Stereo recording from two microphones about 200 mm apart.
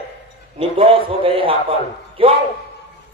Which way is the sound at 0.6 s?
30° right (ahead or behind).